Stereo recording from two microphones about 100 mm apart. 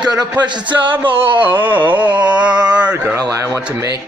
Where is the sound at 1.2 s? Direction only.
20° right (ahead or behind).